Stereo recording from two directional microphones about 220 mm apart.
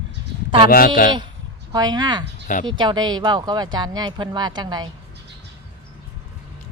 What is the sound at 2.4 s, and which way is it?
Speech, 35° left (ahead or behind).